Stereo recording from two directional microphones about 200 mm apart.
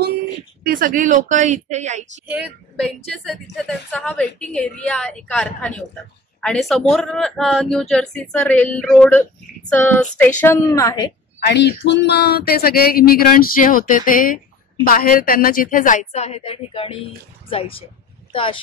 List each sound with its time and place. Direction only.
0.7 s a woman's voice: 45° right (ahead or behind)
2.2 s a woman's voice: 5° right (ahead or behind); by 11.1 s 15° left (ahead or behind)
11.4 s a woman's voice: 60° left (ahead or behind); by 18.6 s 25° left (ahead or behind)